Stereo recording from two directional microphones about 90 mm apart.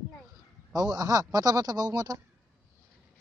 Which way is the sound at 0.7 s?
45° right (ahead or behind).